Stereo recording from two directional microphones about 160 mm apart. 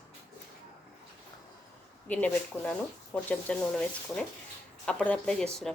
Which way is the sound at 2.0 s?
10° left (ahead or behind).